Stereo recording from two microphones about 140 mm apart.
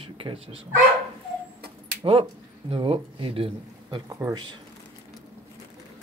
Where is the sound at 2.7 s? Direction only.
40° right (ahead or behind).